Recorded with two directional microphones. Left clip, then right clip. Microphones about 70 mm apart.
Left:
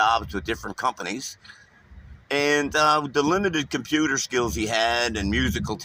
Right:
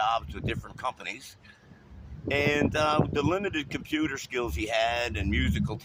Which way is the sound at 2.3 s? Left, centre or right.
Left.